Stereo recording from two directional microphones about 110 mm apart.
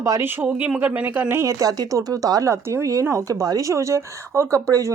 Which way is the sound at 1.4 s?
30° right (ahead or behind).